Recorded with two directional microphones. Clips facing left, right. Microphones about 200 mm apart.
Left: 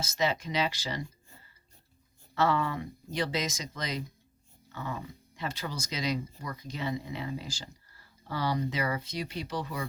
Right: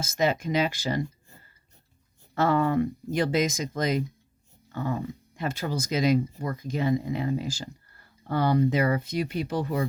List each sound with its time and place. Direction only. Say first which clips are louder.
0.0 s speech: right 5 dB; 50° right (ahead or behind)
2.3 s speech: right 5 dB; 50° right (ahead or behind)